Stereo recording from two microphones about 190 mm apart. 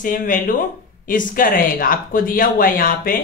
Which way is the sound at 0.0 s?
45° left (ahead or behind).